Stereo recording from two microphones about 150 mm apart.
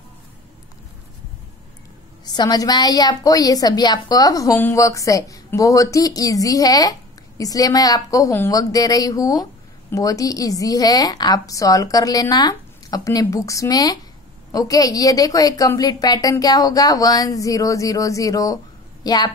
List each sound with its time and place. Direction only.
2.3 s a woman's voice: 25° left (ahead or behind)